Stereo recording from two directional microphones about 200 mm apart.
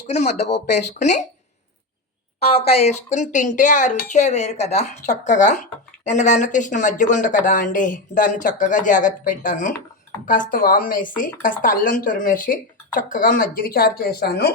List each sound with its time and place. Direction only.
0.1 s speech: 35° left (ahead or behind)
2.4 s speech: 30° left (ahead or behind); by 14.5 s 50° left (ahead or behind)